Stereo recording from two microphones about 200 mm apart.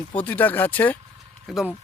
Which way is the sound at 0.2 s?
10° left (ahead or behind).